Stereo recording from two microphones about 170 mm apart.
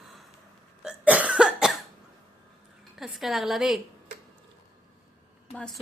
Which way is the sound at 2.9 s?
Centre (ahead or behind).